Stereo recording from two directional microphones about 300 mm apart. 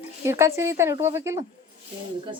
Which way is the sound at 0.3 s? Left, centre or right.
Centre.